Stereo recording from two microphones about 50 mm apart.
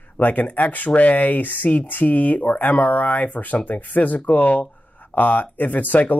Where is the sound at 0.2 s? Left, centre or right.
Left.